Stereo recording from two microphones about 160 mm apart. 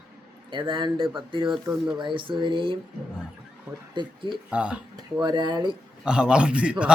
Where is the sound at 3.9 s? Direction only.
30° right (ahead or behind).